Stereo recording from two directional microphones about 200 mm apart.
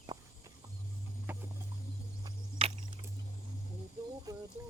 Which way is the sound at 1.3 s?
10° right (ahead or behind).